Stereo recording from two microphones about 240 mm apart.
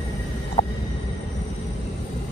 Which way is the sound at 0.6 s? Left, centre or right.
Left.